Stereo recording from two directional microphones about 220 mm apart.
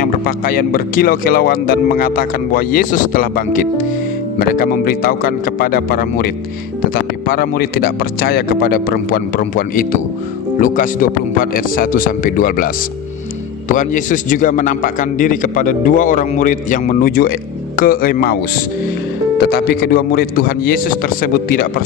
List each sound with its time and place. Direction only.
0.0 s speech: 40° left (ahead or behind)
19.4 s speech: 45° left (ahead or behind)